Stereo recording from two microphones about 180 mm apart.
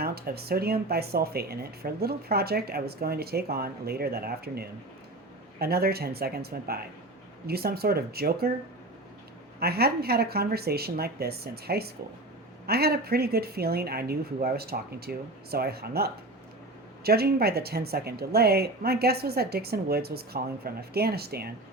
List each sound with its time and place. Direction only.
0.0 s speech: 60° right (ahead or behind)
9.6 s speech: 60° right (ahead or behind)